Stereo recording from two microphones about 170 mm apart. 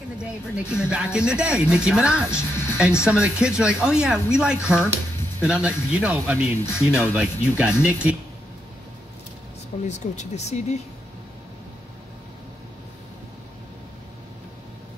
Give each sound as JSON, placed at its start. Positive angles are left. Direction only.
{"t": 0.2, "sound": "speech", "side_deg": -5}
{"t": 9.8, "sound": "speech", "side_deg": 45}